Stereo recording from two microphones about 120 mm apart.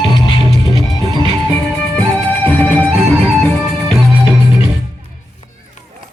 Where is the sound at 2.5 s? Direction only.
15° left (ahead or behind).